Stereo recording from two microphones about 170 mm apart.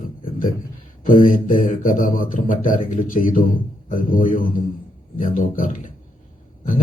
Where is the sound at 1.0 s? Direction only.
55° left (ahead or behind).